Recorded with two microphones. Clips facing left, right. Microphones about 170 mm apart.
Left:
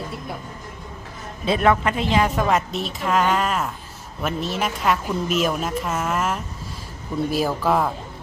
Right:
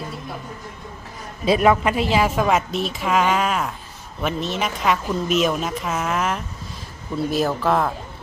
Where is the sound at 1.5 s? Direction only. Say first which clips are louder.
Right 2 dB; 10° right (ahead or behind).